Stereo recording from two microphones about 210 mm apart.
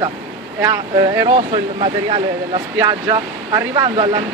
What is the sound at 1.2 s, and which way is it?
Speech, 30° right (ahead or behind).